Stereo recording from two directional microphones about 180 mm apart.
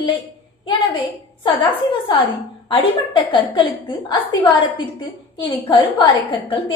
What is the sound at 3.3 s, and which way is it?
Speech, 25° left (ahead or behind).